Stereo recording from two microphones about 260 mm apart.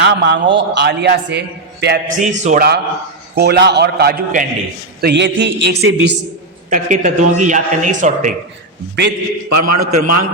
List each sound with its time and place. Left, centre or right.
0.0 s a man's voice: right
6.7 s speech: right
9.5 s a man's voice: right